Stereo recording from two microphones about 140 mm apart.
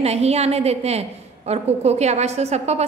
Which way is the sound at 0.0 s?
50° right (ahead or behind).